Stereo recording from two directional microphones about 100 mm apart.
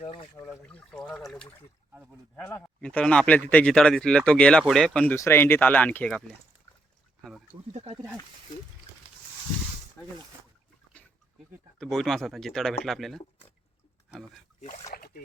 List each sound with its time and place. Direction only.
0.0 s speech: 90° left
0.7 s speech: 10° left (ahead or behind)
2.8 s speech: 10° left (ahead or behind)
5.1 s speech: 25° left (ahead or behind)
7.7 s speech: 90° right
10.0 s a sound: 30° left (ahead or behind)
11.8 s speech: 5° left (ahead or behind)